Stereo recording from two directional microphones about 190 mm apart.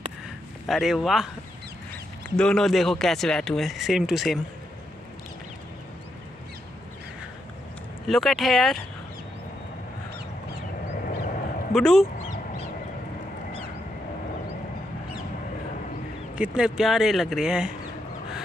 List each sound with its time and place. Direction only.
0.7 s speech: centre (ahead or behind)
2.3 s speech: 5° left (ahead or behind)
8.1 s speech: centre (ahead or behind)
11.1 s a sound: 45° left (ahead or behind)
11.7 s speech: centre (ahead or behind)
16.3 s speech: 5° right (ahead or behind)